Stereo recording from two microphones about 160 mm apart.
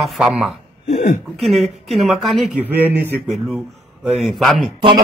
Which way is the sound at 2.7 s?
10° right (ahead or behind).